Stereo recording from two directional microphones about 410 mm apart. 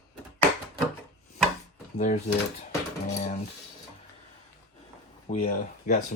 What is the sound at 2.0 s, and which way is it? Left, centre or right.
Speech, centre.